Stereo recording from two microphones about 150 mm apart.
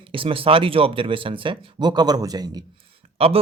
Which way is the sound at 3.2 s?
40° right (ahead or behind).